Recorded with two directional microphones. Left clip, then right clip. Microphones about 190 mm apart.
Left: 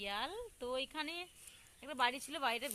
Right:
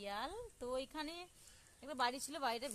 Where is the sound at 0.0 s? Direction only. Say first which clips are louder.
Left 3 dB; 20° left (ahead or behind).